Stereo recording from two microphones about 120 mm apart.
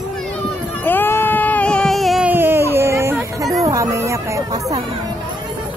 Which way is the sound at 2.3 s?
20° right (ahead or behind).